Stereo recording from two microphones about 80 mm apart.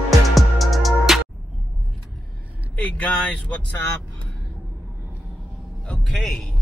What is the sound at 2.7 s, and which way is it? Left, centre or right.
Speech, centre.